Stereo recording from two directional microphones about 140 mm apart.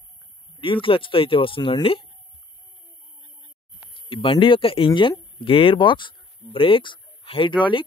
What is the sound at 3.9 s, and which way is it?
Speech, 40° left (ahead or behind).